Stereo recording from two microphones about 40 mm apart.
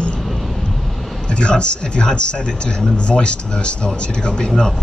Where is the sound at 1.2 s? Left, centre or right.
Left.